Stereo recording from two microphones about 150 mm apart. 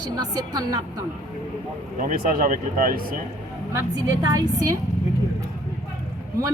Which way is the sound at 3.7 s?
25° right (ahead or behind).